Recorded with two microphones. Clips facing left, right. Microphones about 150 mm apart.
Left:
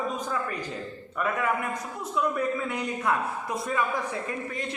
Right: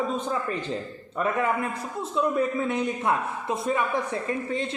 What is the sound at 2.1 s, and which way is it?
A man's voice, 25° right (ahead or behind).